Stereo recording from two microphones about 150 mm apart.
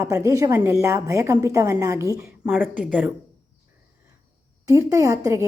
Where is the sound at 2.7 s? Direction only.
10° right (ahead or behind).